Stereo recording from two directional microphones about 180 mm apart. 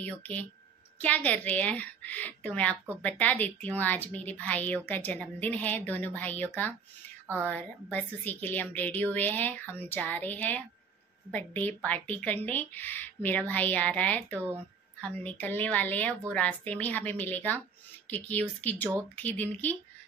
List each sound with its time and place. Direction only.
0.0 s speech: 10° left (ahead or behind)